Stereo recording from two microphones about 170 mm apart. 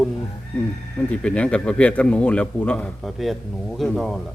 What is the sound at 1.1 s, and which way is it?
A man's voice, 5° left (ahead or behind).